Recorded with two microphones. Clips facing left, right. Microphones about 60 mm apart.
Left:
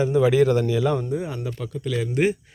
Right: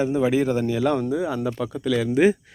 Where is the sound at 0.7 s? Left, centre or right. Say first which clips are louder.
Even; right.